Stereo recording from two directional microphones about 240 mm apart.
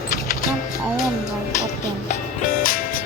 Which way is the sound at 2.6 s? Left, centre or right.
Left.